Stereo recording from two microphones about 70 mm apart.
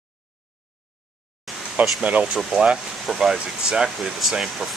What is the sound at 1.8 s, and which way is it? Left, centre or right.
Speech, right.